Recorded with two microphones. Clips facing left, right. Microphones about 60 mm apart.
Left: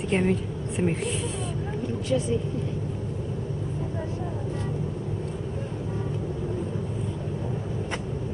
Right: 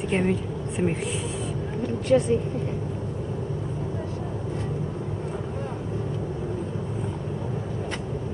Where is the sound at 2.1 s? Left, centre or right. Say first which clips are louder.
Right 6 dB; right.